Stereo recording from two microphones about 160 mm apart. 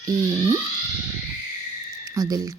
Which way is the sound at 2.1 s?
25° right (ahead or behind).